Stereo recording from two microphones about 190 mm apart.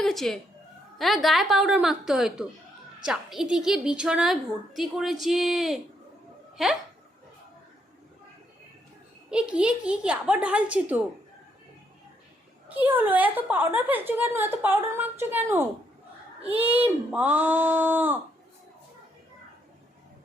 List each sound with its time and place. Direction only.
0.0 s cat: centre (ahead or behind)
0.9 s a woman's voice: centre (ahead or behind)
9.3 s a woman's voice: 5° right (ahead or behind)
12.7 s a woman's voice: 10° right (ahead or behind)